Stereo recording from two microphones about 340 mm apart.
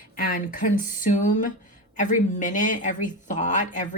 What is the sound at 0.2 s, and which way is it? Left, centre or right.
Speech, left.